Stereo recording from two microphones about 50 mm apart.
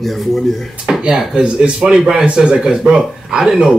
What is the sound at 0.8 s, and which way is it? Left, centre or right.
Speech, centre.